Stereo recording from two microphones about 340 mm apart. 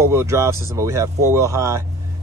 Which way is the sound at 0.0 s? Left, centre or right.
Centre.